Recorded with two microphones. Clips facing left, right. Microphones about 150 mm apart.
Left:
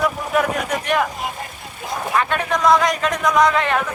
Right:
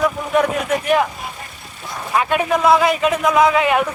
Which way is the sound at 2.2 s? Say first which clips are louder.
Right 4 dB; 10° right (ahead or behind).